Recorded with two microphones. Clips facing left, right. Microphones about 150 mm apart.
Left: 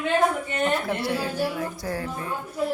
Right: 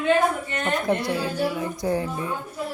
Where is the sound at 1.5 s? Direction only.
20° right (ahead or behind).